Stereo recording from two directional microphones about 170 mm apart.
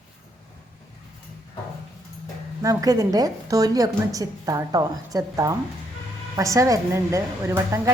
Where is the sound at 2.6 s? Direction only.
20° right (ahead or behind).